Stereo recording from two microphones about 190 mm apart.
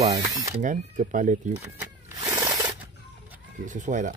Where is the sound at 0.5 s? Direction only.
40° right (ahead or behind).